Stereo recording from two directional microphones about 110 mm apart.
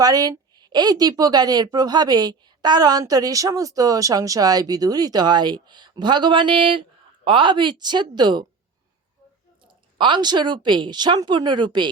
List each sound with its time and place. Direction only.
0.0 s speech: 35° right (ahead or behind)
10.0 s speech: 45° right (ahead or behind)